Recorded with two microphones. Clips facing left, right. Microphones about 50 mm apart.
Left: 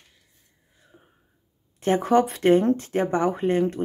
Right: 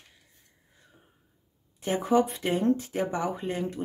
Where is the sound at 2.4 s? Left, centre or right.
Left.